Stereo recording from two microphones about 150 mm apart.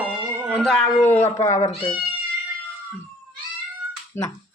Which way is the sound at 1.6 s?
40° left (ahead or behind).